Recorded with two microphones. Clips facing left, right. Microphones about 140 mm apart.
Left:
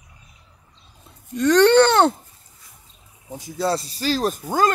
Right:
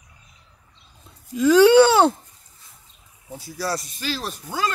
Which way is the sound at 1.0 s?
5° right (ahead or behind).